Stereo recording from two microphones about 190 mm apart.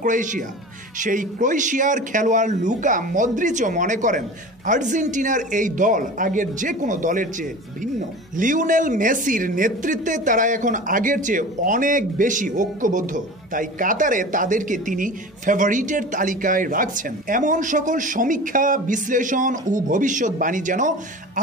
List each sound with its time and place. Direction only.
0.0 s speech: 40° right (ahead or behind)